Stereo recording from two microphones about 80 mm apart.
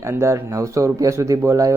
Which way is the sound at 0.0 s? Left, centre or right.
Right.